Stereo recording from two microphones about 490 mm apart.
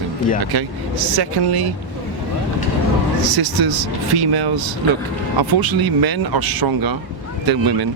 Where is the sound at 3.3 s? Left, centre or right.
Right.